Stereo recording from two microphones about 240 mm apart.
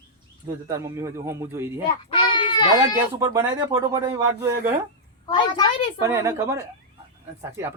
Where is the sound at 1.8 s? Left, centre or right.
Left.